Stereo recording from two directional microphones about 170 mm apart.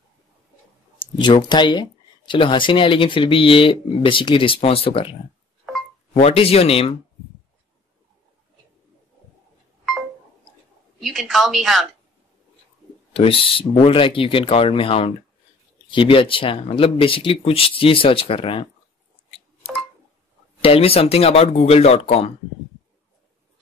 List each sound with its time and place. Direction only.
0.9 s speech: 25° left (ahead or behind)
6.1 s speech: 35° left (ahead or behind)
11.0 s a woman's voice: centre (ahead or behind)
13.1 s speech: 35° left (ahead or behind)
20.6 s speech: 35° left (ahead or behind)